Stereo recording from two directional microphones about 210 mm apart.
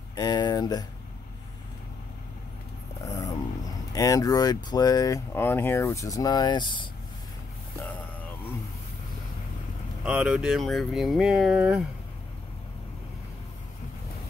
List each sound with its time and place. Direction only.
0.1 s a sound: 20° left (ahead or behind)
3.1 s speech: 15° left (ahead or behind)
10.0 s speech: 5° right (ahead or behind)